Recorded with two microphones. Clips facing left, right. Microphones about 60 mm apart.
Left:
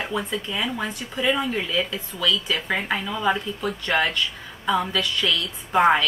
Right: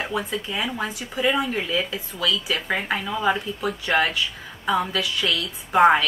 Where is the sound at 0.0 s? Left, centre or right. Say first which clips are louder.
Even; centre.